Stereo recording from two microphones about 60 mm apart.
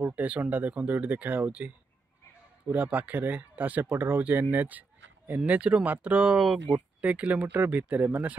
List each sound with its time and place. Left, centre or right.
0.0 s speech: right
2.7 s speech: right
3.9 s speech: right
6.3 s speech: centre
7.0 s speech: right